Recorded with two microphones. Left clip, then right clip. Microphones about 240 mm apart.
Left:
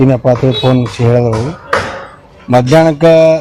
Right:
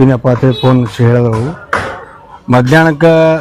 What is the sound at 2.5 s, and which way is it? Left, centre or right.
Speech, right.